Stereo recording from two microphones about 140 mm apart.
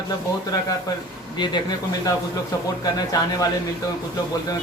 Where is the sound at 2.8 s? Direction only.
25° left (ahead or behind).